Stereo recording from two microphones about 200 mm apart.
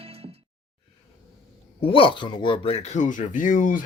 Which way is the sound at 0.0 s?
30° right (ahead or behind).